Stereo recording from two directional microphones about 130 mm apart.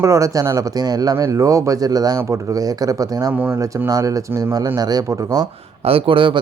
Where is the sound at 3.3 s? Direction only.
15° right (ahead or behind).